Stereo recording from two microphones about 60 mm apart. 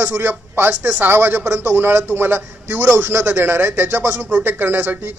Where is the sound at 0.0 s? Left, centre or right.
Right.